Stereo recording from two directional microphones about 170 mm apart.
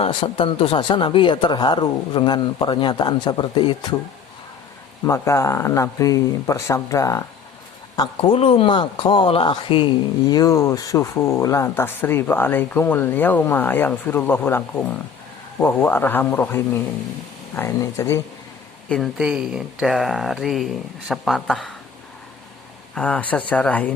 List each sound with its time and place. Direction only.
0.0 s speech: 30° left (ahead or behind)
5.0 s speech: 15° left (ahead or behind)
18.9 s speech: centre (ahead or behind)
23.0 s speech: 5° left (ahead or behind)